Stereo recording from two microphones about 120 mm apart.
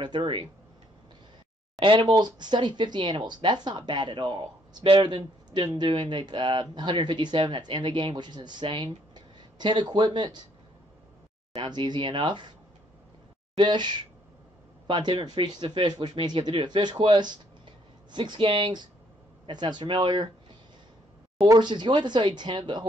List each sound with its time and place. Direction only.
0.0 s speech: 45° right (ahead or behind)
1.8 s speech: 45° right (ahead or behind)
11.5 s speech: 45° right (ahead or behind)
13.6 s speech: 40° right (ahead or behind)
21.5 s speech: 40° right (ahead or behind)